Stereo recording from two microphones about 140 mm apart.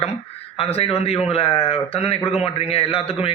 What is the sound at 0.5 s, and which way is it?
Speech, 45° left (ahead or behind).